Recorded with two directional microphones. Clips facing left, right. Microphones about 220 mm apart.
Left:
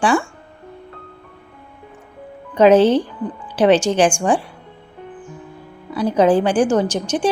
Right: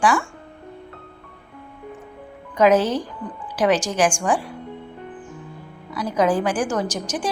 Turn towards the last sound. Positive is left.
turn(degrees=30)  # may be behind; listen again after turning